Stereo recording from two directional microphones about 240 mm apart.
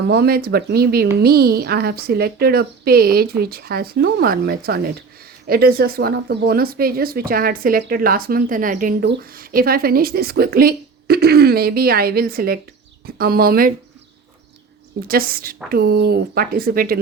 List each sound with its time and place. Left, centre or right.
0.1 s speech: right
15.0 s speech: right